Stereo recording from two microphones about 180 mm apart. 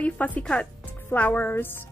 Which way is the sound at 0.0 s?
10° left (ahead or behind).